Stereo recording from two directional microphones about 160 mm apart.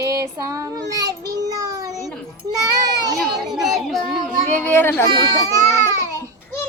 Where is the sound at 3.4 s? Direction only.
Centre (ahead or behind).